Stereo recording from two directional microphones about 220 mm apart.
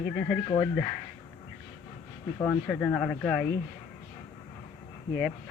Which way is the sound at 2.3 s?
5° left (ahead or behind).